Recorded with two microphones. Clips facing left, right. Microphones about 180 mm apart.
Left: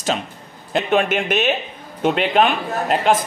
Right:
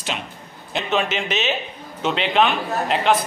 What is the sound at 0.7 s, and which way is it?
Speech, 55° left (ahead or behind).